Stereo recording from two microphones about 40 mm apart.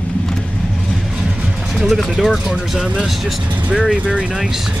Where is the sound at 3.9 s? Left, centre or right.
Right.